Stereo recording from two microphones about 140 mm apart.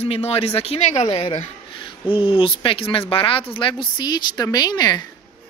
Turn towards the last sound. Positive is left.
turn(degrees=30)  # may be behind; listen again after turning